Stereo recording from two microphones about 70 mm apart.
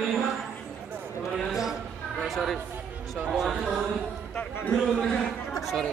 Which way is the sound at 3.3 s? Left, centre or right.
Centre.